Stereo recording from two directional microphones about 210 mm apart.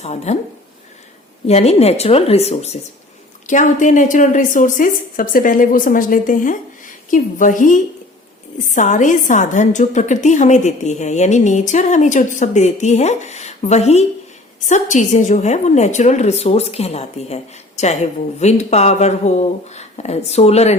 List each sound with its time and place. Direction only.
0.0 s a woman's voice: 30° left (ahead or behind)
1.5 s a woman's voice: 30° left (ahead or behind)